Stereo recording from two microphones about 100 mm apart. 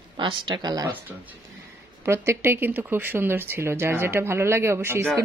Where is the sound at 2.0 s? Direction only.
25° right (ahead or behind).